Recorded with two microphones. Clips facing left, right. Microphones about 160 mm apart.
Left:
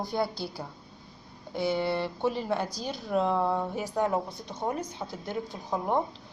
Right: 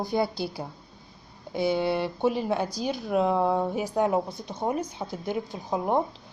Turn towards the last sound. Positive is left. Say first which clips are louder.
# right 3 dB
turn(degrees=-15)  # may be behind; listen again after turning